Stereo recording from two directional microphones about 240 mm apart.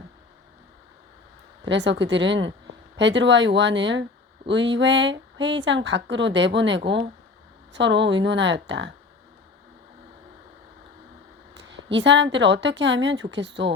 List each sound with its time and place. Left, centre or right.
1.6 s speech: right
11.5 s a woman's voice: right